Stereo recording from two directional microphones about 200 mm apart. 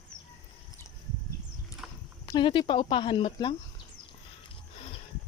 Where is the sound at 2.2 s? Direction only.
25° left (ahead or behind).